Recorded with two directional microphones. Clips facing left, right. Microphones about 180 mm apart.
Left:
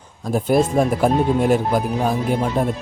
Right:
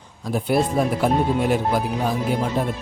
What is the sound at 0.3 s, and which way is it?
Speech, 45° left (ahead or behind).